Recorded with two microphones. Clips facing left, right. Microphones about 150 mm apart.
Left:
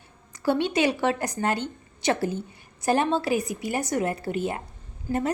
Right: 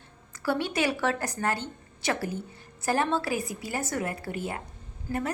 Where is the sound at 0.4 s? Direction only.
20° left (ahead or behind).